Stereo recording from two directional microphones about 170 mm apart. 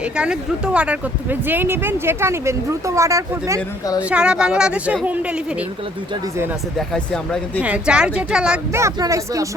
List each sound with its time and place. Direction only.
0.0 s speech: 5° right (ahead or behind)
4.1 s a woman's voice: 5° right (ahead or behind)
6.7 s a woman's voice: 5° left (ahead or behind)
7.6 s a woman's voice: 5° right (ahead or behind)
8.8 s speech: 20° right (ahead or behind)